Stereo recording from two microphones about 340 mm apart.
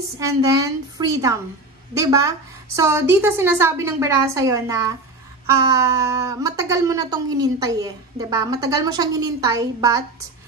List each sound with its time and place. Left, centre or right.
0.2 s speech: centre